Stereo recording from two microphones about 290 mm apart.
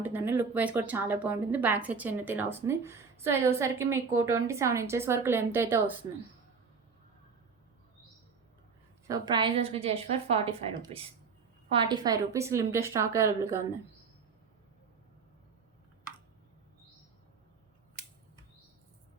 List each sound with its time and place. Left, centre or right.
0.0 s a woman's voice: centre
9.0 s a woman's voice: centre